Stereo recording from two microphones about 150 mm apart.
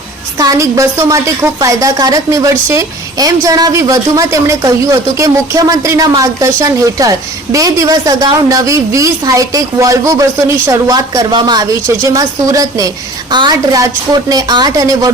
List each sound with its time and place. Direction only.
0.3 s a woman's voice: 20° right (ahead or behind)